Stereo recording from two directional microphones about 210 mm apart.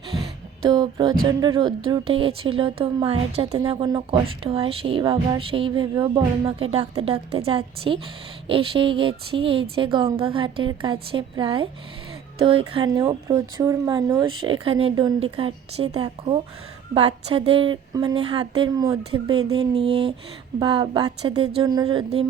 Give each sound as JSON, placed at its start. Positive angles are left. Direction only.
{"t": 0.6, "sound": "speech", "side_deg": -20}